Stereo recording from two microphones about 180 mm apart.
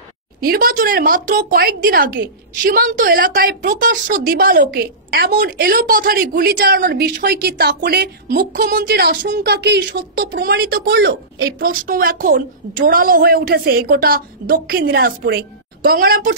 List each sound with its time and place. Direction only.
0.5 s a woman's voice: 55° right (ahead or behind)